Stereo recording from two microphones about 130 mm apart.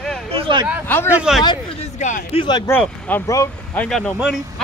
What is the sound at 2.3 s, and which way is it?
Speech, 40° left (ahead or behind).